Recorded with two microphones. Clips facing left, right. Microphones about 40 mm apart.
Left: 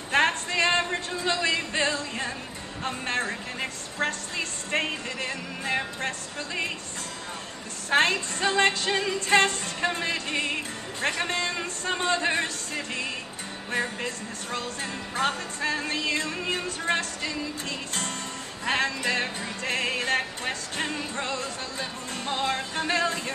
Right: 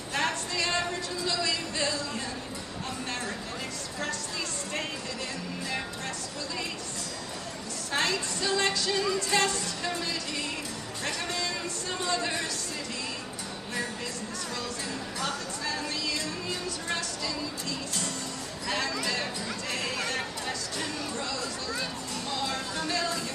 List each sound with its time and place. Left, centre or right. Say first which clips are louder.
0.1 s music: left 7 dB; left
7.9 s music: left 6 dB; left